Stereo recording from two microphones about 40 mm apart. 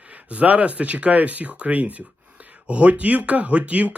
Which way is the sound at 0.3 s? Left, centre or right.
Right.